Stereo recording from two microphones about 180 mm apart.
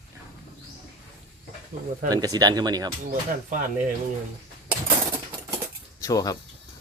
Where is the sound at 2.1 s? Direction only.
20° right (ahead or behind).